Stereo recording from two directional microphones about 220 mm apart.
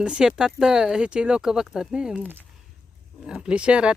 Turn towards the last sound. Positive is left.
turn(degrees=-5)  # may be behind; listen again after turning